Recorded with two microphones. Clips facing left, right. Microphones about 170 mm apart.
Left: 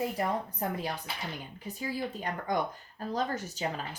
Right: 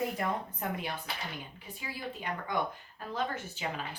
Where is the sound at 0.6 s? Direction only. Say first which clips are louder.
Left 3 dB; 35° left (ahead or behind).